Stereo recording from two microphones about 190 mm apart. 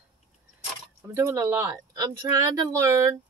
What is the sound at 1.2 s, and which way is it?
Speech, 15° right (ahead or behind).